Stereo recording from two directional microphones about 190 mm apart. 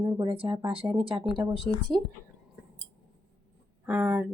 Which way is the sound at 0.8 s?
5° right (ahead or behind).